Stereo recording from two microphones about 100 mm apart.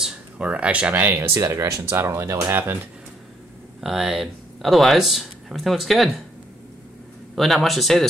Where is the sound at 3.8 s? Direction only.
Centre (ahead or behind).